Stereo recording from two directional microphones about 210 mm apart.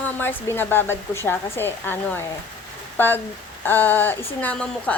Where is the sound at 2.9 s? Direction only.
10° left (ahead or behind).